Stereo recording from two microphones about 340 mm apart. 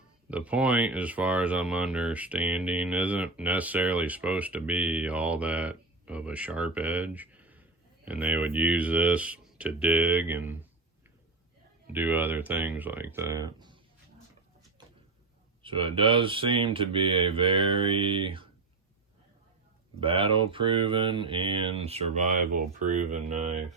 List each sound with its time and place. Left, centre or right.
0.3 s speech: centre
11.9 s speech: centre
15.6 s speech: centre
20.0 s speech: centre